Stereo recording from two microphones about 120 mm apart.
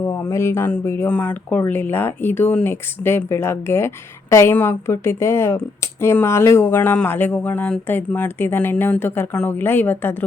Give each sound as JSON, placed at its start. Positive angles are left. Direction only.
{"t": 0.0, "sound": "speech", "side_deg": 20}